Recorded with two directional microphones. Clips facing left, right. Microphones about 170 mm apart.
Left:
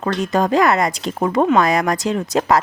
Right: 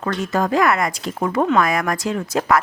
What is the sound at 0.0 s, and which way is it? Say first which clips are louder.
Speech: left 3 dB; 20° left (ahead or behind).